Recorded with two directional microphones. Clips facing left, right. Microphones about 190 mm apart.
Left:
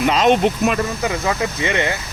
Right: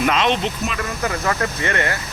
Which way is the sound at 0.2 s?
50° left (ahead or behind).